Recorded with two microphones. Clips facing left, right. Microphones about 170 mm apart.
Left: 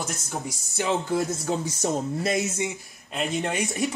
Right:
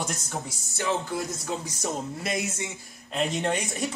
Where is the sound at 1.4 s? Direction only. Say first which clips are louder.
Left 5 dB; 25° left (ahead or behind).